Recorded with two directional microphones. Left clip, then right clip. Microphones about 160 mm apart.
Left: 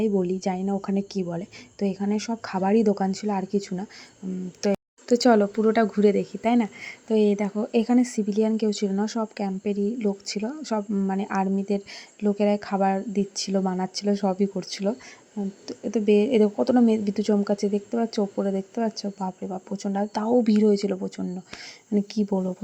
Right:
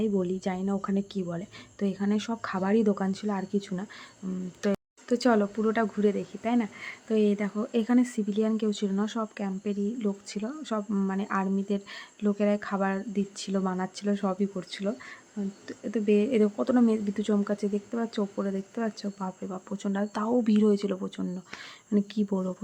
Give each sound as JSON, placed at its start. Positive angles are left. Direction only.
{"t": 0.2, "sound": "speech", "side_deg": 10}
{"t": 5.0, "sound": "speech", "side_deg": 20}